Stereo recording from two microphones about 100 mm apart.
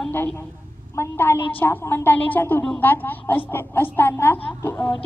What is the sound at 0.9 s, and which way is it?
A woman's voice, 25° left (ahead or behind).